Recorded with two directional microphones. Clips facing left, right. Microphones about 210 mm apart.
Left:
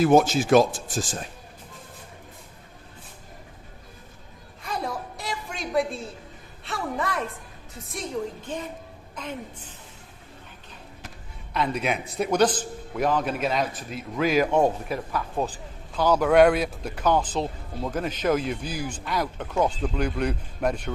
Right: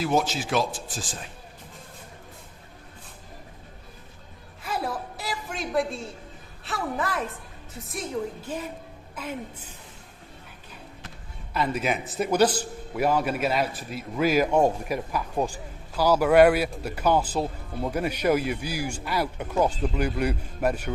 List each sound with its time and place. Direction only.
0.0 s speech: 50° left (ahead or behind)
4.6 s a sound: 5° right (ahead or behind)
6.7 s a woman's voice: centre (ahead or behind)
11.5 s a man's voice: 5° right (ahead or behind)